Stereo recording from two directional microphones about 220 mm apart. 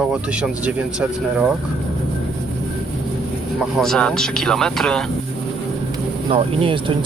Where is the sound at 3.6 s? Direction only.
Centre (ahead or behind).